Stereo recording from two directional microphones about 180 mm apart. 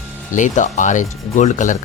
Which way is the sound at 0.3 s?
45° left (ahead or behind).